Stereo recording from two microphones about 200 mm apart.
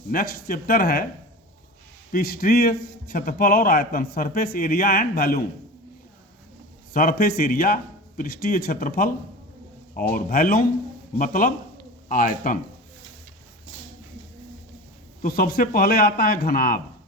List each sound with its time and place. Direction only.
0.1 s a man's voice: 45° left (ahead or behind)
2.1 s a man's voice: 50° left (ahead or behind)
6.9 s a man's voice: 45° left (ahead or behind)
15.2 s a man's voice: 45° left (ahead or behind)